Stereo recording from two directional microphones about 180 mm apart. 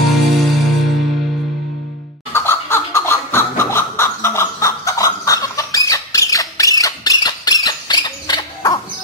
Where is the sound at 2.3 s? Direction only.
15° left (ahead or behind).